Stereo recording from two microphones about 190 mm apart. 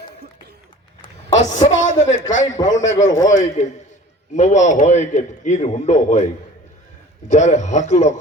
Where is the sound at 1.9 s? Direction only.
40° left (ahead or behind).